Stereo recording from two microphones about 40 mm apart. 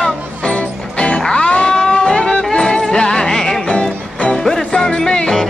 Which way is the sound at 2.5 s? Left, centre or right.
Centre.